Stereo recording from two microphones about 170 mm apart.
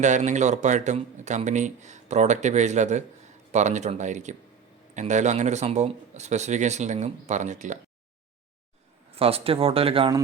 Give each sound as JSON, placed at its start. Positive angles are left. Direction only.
{"t": 0.0, "sound": "speech", "side_deg": -45}
{"t": 9.1, "sound": "speech", "side_deg": -35}